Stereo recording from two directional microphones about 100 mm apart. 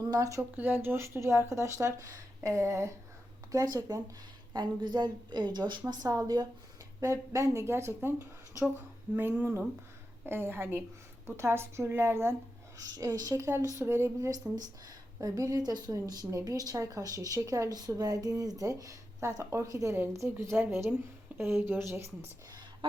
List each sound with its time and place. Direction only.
0.0 s speech: 35° right (ahead or behind)
0.5 s speech: 20° right (ahead or behind); by 4.0 s 35° right (ahead or behind)
4.5 s a woman's voice: 45° right (ahead or behind); by 12.4 s 25° right (ahead or behind)
12.8 s speech: 35° right (ahead or behind)
22.8 s chicken: 60° right (ahead or behind)